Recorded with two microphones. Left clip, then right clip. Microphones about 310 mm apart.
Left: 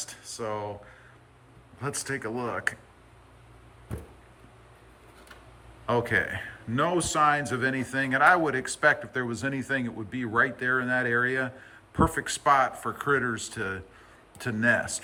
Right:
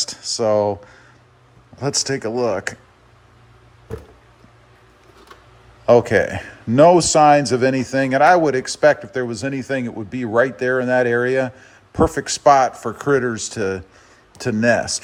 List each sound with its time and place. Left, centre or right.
0.0 s a sound: centre
1.8 s speech: centre
5.8 s speech: centre